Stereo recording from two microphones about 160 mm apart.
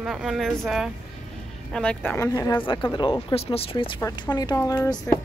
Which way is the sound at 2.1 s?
20° left (ahead or behind).